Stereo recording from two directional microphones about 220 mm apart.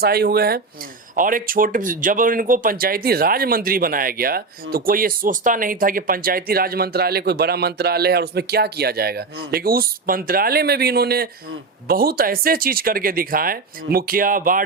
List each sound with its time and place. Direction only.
0.0 s speech: 45° right (ahead or behind)